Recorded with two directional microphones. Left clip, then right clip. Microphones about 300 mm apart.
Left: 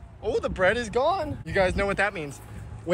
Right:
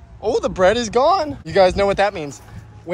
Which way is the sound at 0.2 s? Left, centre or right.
Centre.